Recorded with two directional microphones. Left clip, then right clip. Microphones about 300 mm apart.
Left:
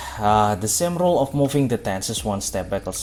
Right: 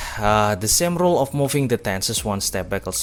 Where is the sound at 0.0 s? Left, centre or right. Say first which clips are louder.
Even; right.